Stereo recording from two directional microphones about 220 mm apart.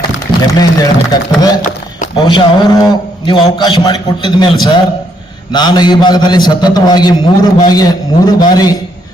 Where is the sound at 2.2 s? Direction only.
20° left (ahead or behind).